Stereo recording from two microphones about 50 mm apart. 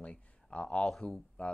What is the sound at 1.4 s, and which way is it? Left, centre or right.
Speech, left.